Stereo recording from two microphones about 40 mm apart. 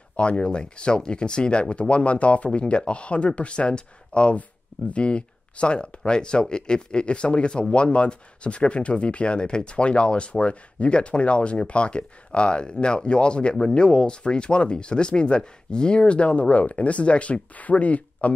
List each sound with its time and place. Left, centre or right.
0.1 s speech: left